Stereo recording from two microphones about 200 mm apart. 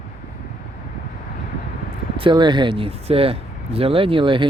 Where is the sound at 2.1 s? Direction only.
25° right (ahead or behind).